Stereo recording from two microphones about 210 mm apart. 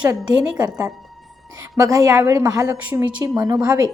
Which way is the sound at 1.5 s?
15° right (ahead or behind).